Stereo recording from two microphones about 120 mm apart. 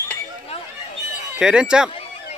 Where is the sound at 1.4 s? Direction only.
5° right (ahead or behind).